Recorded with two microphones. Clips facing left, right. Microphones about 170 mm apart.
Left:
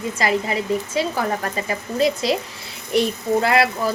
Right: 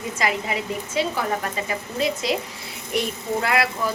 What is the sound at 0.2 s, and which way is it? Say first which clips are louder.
Speech: left 3 dB; 35° left (ahead or behind).